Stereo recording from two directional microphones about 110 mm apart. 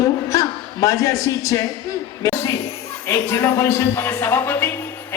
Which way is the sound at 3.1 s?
20° left (ahead or behind).